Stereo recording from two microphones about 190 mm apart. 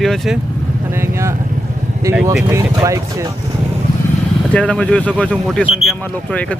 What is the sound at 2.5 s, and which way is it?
Speech, 15° right (ahead or behind).